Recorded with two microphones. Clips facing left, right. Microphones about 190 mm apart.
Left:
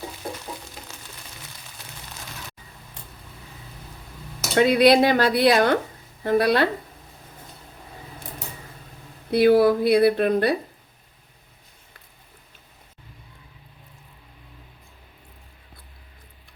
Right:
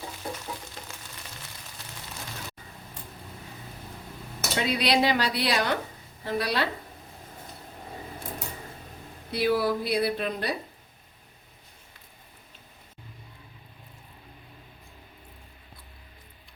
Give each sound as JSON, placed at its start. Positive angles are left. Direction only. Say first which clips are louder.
{"t": 4.5, "sound": "speech", "louder": "left 10 dB", "side_deg": 55}
{"t": 9.3, "sound": "speech", "louder": "left 9 dB", "side_deg": 55}